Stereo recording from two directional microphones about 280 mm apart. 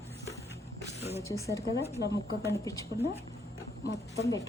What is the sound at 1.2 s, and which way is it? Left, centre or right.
Speech, centre.